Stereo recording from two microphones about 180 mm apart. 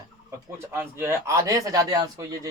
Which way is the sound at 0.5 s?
15° right (ahead or behind).